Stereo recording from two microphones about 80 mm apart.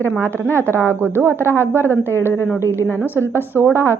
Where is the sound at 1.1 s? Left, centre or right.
Right.